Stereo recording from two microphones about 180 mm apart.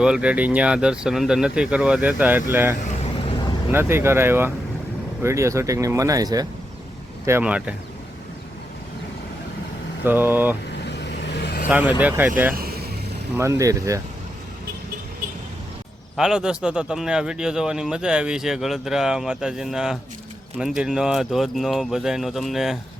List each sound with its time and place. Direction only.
0.0 s speech: 5° right (ahead or behind)
3.2 s vehicle: 25° left (ahead or behind)
3.7 s speech: 15° right (ahead or behind)
7.3 s speech: 10° right (ahead or behind)
10.0 s speech: 10° right (ahead or behind)
10.7 s vehicle: 70° left (ahead or behind)
11.7 s speech: 10° right (ahead or behind)
12.5 s vehicle: 60° right (ahead or behind)
13.3 s speech: 15° right (ahead or behind)
16.1 s speech: 5° right (ahead or behind)